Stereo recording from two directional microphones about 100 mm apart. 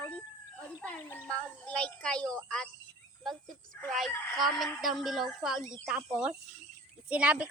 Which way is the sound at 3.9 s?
Centre (ahead or behind).